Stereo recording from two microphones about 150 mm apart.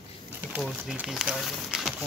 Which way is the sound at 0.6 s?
Centre (ahead or behind).